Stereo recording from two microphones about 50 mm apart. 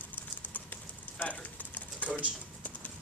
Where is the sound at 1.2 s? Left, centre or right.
Left.